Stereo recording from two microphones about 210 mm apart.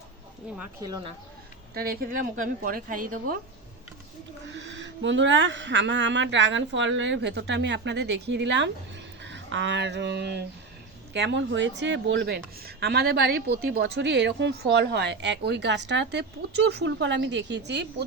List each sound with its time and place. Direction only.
0.8 s speech: 15° right (ahead or behind)
1.7 s a woman's voice: 45° right (ahead or behind)
4.5 s speech: 60° right (ahead or behind)